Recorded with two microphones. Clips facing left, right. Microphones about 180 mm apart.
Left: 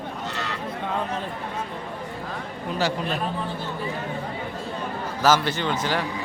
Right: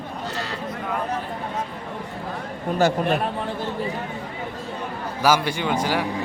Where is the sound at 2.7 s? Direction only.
50° right (ahead or behind).